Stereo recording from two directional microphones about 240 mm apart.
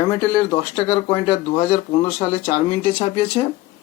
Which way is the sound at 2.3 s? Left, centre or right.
Left.